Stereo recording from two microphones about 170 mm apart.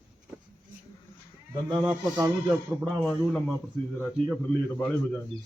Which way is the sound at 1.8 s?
10° right (ahead or behind).